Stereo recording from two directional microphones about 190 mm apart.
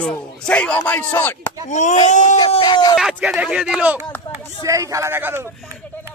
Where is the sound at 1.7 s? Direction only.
40° left (ahead or behind).